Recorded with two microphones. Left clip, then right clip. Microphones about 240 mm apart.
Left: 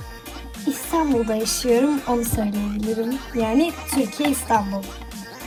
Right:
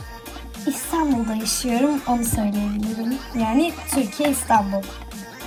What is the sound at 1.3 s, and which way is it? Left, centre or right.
Speech, centre.